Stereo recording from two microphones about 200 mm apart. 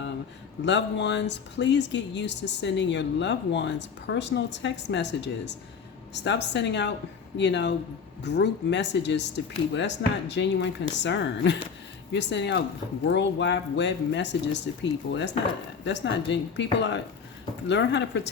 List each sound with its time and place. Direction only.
0.6 s speech: 60° left (ahead or behind)